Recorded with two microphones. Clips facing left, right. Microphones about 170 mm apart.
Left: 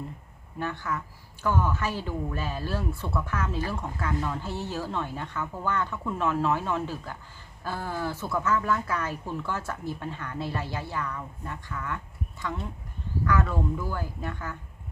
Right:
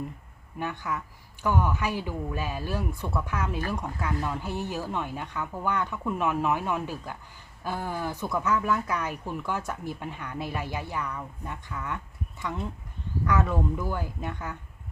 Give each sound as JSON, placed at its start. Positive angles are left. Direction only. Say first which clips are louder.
{"t": 0.6, "sound": "speech", "louder": "even", "side_deg": -15}
{"t": 13.2, "sound": "speech", "louder": "right 1 dB", "side_deg": -20}